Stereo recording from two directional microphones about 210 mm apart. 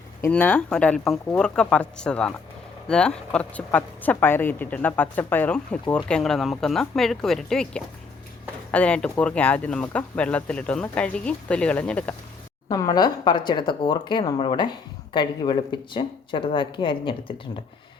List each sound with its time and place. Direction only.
0.2 s speech: 10° left (ahead or behind)
12.7 s speech: 15° left (ahead or behind)